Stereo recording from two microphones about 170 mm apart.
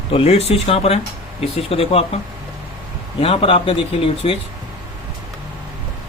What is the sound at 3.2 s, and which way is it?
A man's voice, 35° left (ahead or behind).